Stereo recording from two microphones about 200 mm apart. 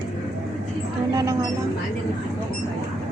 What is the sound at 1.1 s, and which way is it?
Speech, 20° right (ahead or behind).